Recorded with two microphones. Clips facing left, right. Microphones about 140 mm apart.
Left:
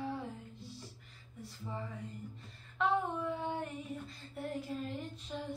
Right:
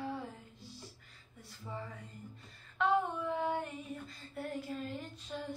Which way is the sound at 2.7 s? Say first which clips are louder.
Right 1 dB; centre (ahead or behind).